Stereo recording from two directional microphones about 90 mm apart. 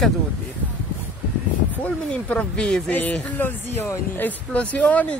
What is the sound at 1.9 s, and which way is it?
Speech, 10° left (ahead or behind).